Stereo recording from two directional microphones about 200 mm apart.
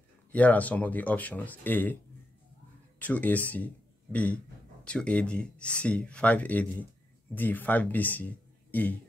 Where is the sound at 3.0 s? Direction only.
10° left (ahead or behind).